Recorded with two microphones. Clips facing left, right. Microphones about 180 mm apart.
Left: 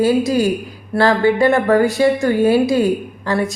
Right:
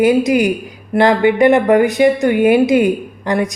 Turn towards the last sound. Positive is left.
turn(degrees=-20)  # may be behind; listen again after turning